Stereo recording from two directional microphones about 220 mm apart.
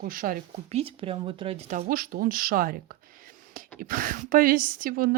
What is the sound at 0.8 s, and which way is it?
Speech, 25° right (ahead or behind).